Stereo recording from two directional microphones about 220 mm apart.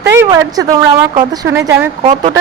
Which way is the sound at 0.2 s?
15° right (ahead or behind).